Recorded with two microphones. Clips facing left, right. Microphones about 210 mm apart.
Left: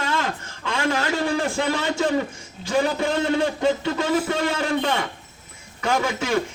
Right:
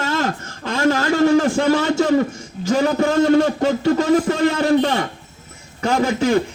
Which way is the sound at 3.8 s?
40° right (ahead or behind).